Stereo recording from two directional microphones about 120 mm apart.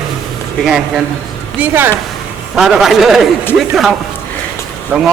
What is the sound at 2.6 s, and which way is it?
Speech, centre (ahead or behind).